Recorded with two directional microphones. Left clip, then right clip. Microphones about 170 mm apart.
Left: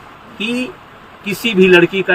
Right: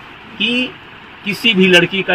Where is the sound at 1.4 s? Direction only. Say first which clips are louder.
Left 1 dB; 20° left (ahead or behind).